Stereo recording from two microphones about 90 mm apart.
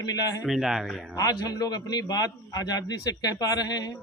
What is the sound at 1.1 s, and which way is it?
A man's voice, 45° left (ahead or behind).